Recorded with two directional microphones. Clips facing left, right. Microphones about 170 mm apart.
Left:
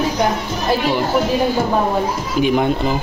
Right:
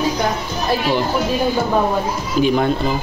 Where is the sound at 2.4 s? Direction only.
15° left (ahead or behind).